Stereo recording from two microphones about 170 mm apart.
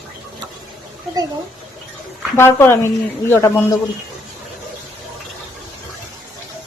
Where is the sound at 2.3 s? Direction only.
15° left (ahead or behind).